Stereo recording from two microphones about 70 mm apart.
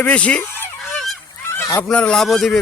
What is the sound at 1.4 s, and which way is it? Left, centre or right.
Goose, left.